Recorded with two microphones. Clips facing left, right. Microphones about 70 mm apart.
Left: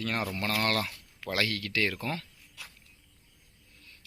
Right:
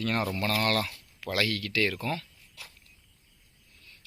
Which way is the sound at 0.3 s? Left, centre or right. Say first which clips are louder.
Right 2 dB; left.